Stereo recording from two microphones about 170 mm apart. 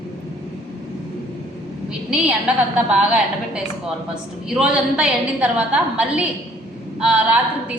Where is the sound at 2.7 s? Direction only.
5° right (ahead or behind).